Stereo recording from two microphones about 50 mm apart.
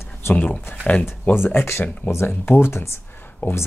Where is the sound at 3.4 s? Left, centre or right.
Left.